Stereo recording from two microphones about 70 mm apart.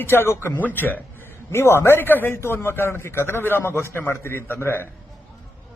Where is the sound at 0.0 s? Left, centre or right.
Left.